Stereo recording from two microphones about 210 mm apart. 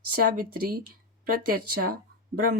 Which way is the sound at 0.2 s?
45° right (ahead or behind).